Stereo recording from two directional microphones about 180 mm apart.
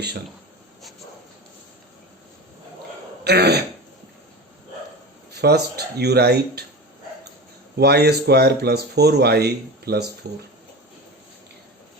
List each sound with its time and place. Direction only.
3.2 s speech: 65° right (ahead or behind)
5.4 s speech: 65° right (ahead or behind)
7.8 s speech: 65° right (ahead or behind)